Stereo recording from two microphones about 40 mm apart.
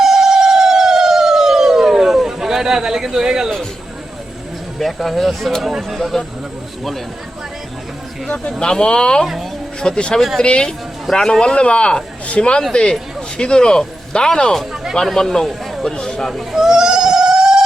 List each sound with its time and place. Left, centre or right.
0.0 s a sound: centre
4.8 s speech: centre
8.5 s a man's voice: centre
9.2 s speech: centre
9.8 s a man's voice: left
15.8 s a sound: centre
16.3 s goat: centre